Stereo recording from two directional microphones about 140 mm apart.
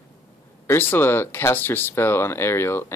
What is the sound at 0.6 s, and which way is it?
Speech, 15° left (ahead or behind).